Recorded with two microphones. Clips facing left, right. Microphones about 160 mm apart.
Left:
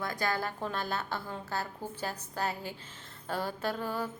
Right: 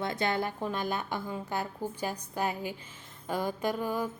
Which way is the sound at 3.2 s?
15° right (ahead or behind).